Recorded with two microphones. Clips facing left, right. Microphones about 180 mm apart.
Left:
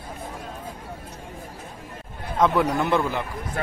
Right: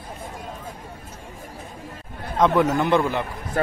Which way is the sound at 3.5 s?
40° right (ahead or behind).